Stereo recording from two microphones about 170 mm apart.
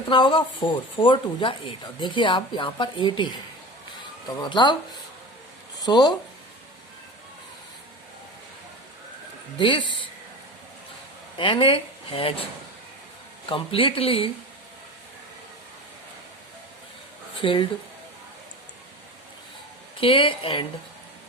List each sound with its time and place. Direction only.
0.1 s speech: 30° left (ahead or behind)
5.8 s speech: 25° left (ahead or behind)
9.6 s speech: 30° left (ahead or behind)
11.3 s speech: 30° left (ahead or behind)
13.5 s speech: 30° left (ahead or behind)
17.3 s speech: 30° left (ahead or behind)
20.0 s speech: 30° left (ahead or behind)